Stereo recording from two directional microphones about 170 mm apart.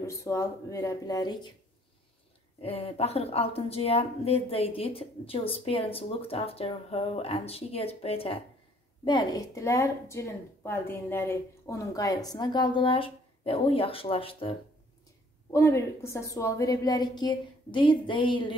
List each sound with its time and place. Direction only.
0.0 s a woman's voice: 15° left (ahead or behind)
2.6 s a woman's voice: 35° left (ahead or behind)
15.5 s a woman's voice: 15° left (ahead or behind)